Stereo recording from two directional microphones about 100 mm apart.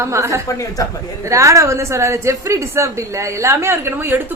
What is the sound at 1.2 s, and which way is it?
A woman's voice, 30° right (ahead or behind).